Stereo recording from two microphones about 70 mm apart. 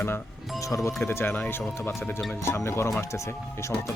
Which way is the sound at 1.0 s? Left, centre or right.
Left.